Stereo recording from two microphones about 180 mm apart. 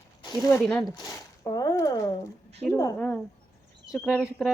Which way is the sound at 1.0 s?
20° left (ahead or behind).